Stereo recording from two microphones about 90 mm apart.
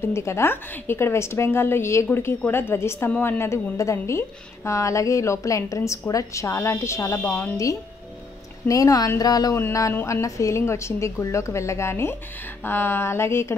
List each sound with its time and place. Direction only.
0.1 s a woman's voice: 30° left (ahead or behind)
8.6 s a woman's voice: 40° left (ahead or behind)
9.2 s a sound: 45° left (ahead or behind)
9.6 s a woman's voice: 35° left (ahead or behind)
9.9 s a woman's voice: 25° left (ahead or behind)